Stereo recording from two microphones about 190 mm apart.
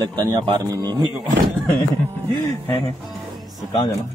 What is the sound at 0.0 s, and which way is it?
Speech, 20° right (ahead or behind).